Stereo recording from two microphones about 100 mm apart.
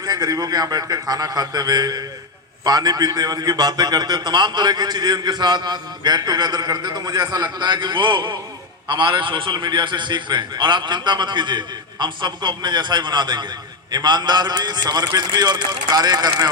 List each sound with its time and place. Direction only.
0.0 s a man's voice: 35° right (ahead or behind)